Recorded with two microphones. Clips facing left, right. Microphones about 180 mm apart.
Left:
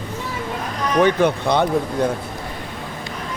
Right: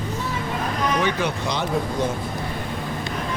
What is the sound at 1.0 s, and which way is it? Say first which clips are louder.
Speech: left 7 dB; 55° left (ahead or behind).